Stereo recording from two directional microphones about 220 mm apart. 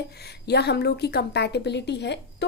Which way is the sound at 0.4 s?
50° left (ahead or behind).